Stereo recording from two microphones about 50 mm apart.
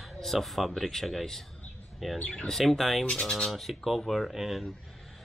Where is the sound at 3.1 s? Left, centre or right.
Centre.